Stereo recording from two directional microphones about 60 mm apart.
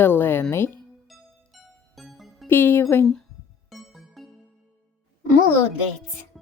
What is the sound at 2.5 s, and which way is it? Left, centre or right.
Speech, left.